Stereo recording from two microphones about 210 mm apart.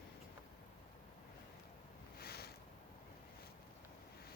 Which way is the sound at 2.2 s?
50° left (ahead or behind).